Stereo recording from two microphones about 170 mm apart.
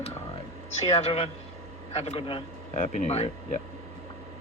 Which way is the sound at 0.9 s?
35° left (ahead or behind).